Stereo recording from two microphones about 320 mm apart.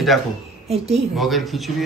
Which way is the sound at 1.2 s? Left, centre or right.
Centre.